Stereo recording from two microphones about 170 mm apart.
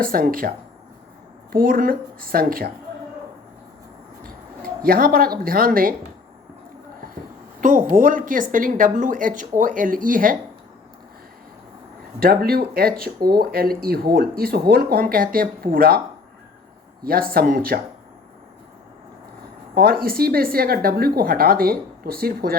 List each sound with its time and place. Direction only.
0.0 s speech: 55° right (ahead or behind)
1.5 s speech: 60° right (ahead or behind)
4.2 s speech: 60° right (ahead or behind)
7.6 s speech: 50° right (ahead or behind)
12.2 s speech: 65° right (ahead or behind)
17.0 s speech: 60° right (ahead or behind)
19.7 s speech: 65° right (ahead or behind)